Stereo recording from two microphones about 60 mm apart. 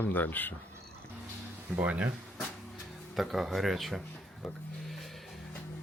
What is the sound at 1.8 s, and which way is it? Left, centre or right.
Speech, right.